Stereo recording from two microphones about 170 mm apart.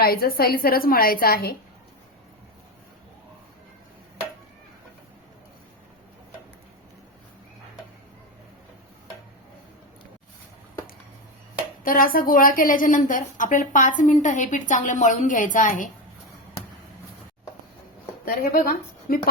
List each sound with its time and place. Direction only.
0.0 s a woman's voice: 65° left (ahead or behind)
11.8 s a woman's voice: 55° left (ahead or behind)
18.3 s a woman's voice: 55° left (ahead or behind)